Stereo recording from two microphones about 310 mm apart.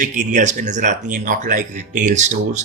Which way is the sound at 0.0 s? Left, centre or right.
Right.